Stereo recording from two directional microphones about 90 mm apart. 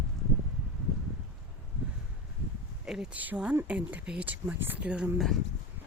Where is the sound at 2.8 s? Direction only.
10° right (ahead or behind).